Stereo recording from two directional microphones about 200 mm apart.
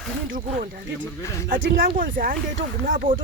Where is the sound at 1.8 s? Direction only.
45° right (ahead or behind).